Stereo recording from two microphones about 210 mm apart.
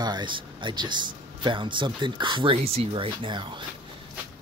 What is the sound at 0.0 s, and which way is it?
Speech, 20° right (ahead or behind).